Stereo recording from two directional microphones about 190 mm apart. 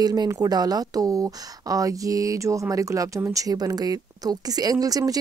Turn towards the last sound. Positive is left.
turn(degrees=-20)  # may be behind; listen again after turning